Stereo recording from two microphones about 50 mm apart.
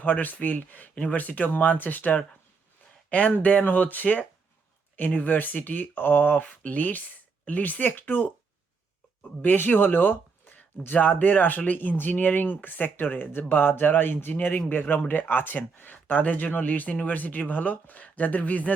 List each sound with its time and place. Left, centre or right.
0.0 s speech: left
9.4 s speech: left